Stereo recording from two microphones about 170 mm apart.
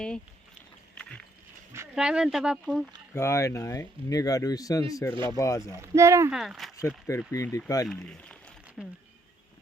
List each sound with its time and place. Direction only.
2.0 s speech: 5° right (ahead or behind)
3.2 s speech: 15° left (ahead or behind)
5.8 s speech: 15° right (ahead or behind)
6.3 s speech: 5° right (ahead or behind)
6.8 s speech: 15° left (ahead or behind)
8.8 s speech: centre (ahead or behind)